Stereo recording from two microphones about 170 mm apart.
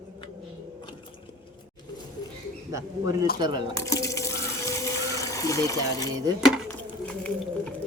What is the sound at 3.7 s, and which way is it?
Water, 20° left (ahead or behind).